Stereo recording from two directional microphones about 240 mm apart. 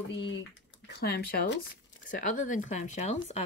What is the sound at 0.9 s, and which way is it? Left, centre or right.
Speech, left.